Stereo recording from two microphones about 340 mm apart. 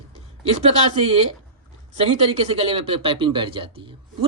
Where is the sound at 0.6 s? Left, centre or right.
Centre.